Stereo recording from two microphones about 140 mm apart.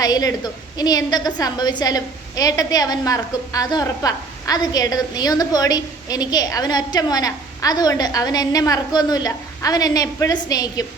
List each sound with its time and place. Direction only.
0.0 s a woman's voice: 25° left (ahead or behind)